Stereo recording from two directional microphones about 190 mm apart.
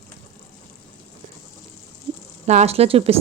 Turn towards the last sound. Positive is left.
turn(degrees=-30)  # may be behind; listen again after turning